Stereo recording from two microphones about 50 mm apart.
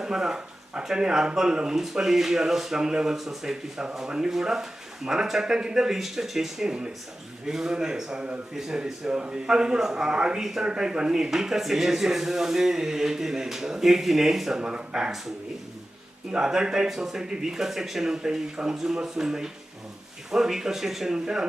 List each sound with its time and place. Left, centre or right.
0.0 s speech: centre
14.6 s speech: centre
16.3 s speech: centre